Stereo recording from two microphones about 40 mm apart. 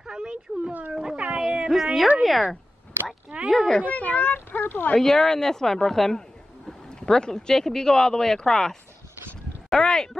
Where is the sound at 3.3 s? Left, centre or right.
Right.